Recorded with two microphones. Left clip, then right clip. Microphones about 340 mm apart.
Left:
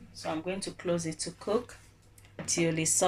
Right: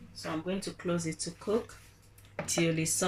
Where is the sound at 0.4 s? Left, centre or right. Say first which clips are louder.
Left 2 dB; left.